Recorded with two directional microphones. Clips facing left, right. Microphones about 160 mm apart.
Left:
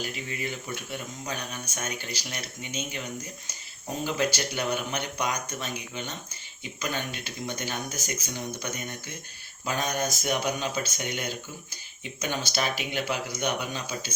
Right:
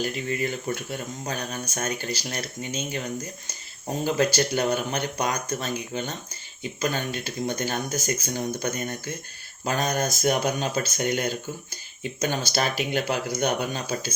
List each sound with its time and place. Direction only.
0.0 s speech: 45° right (ahead or behind)
4.0 s speech: 40° right (ahead or behind)